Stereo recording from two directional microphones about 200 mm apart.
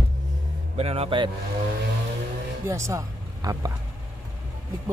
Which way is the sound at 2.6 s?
15° right (ahead or behind).